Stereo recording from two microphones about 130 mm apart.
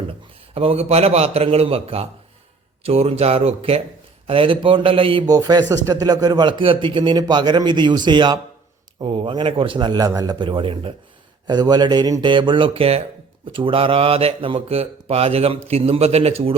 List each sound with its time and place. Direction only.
0.1 s a man's voice: 45° right (ahead or behind)
5.3 s a man's voice: 30° right (ahead or behind); by 16.6 s 50° right (ahead or behind)